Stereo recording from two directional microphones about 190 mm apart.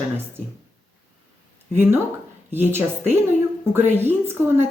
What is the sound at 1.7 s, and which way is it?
A woman's voice, 10° right (ahead or behind).